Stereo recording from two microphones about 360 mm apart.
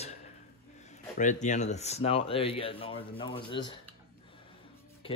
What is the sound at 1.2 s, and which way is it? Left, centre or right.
Speech, centre.